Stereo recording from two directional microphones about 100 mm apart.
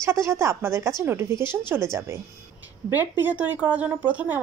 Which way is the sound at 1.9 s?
30° right (ahead or behind).